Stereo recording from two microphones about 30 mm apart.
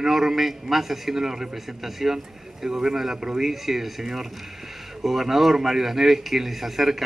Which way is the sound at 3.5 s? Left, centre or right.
Centre.